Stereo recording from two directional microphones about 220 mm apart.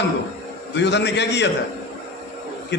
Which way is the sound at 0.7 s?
50° left (ahead or behind).